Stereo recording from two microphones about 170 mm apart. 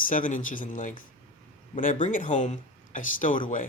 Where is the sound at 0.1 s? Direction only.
50° left (ahead or behind).